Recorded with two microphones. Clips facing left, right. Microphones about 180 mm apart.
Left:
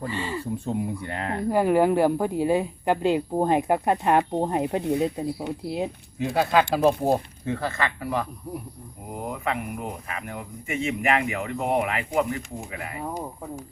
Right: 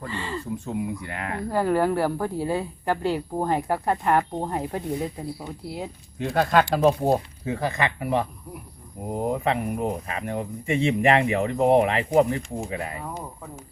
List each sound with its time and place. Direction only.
0.0 s speech: 10° left (ahead or behind)
0.6 s speech: 30° left (ahead or behind)
1.5 s speech: 15° left (ahead or behind)
6.1 s speech: 5° left (ahead or behind)
7.5 s speech: 15° right (ahead or behind); by 13.0 s 30° right (ahead or behind)